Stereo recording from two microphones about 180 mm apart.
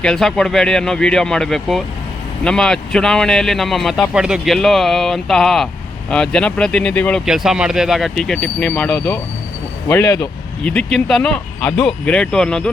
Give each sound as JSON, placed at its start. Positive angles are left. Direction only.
{"t": 0.0, "sound": "a man's voice", "side_deg": 5}
{"t": 9.9, "sound": "speech", "side_deg": 15}
{"t": 10.6, "sound": "a man's voice", "side_deg": 5}